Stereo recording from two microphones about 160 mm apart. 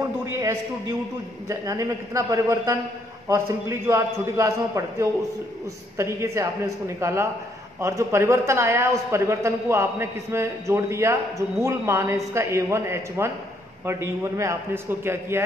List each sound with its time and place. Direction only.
1.5 s a man's voice: 20° right (ahead or behind)